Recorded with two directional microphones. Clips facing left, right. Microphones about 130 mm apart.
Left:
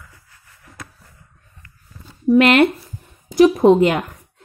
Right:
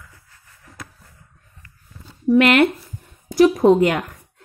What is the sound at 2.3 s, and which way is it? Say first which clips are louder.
A woman's voice: left 2 dB; 25° left (ahead or behind).